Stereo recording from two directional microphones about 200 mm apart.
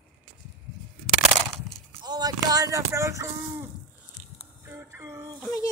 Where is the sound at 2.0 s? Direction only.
20° right (ahead or behind).